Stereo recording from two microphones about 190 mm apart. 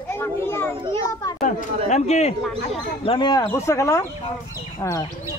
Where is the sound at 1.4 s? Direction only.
45° left (ahead or behind).